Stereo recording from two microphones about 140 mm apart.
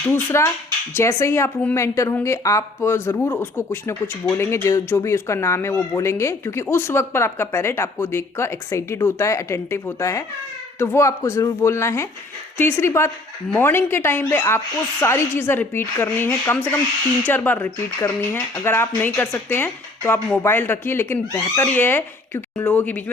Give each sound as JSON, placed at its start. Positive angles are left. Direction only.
{"t": 0.3, "sound": "a woman's voice", "side_deg": 20}